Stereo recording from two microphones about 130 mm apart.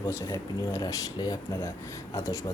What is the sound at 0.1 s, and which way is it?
Speech, 20° left (ahead or behind).